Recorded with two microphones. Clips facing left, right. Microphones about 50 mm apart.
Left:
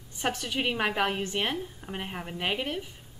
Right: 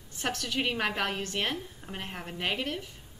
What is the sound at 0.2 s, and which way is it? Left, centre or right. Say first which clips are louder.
A woman's voice: left 2 dB; centre.